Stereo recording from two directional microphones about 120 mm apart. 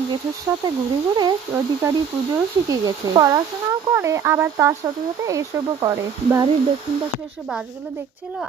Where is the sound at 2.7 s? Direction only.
30° right (ahead or behind).